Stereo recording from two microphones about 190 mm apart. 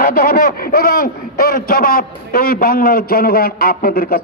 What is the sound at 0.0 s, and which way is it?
A man's voice, 50° left (ahead or behind).